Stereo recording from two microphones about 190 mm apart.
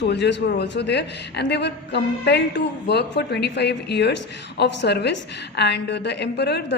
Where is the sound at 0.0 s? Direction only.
65° left (ahead or behind).